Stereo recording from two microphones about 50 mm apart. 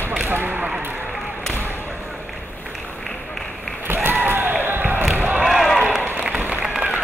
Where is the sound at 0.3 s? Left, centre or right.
Right.